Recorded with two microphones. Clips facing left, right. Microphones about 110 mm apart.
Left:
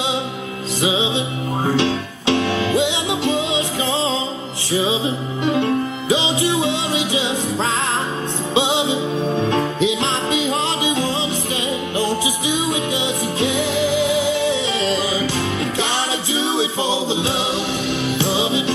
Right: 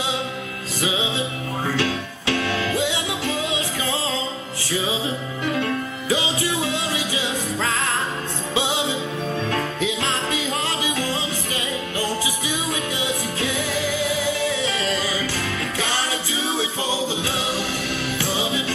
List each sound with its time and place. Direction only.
0.8 s music: 20° left (ahead or behind)
4.7 s music: 20° left (ahead or behind)
8.5 s music: 20° left (ahead or behind)
13.4 s music: 20° left (ahead or behind)
16.3 s music: 20° left (ahead or behind)